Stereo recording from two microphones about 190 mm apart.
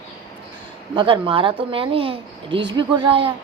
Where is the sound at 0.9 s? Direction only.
25° right (ahead or behind).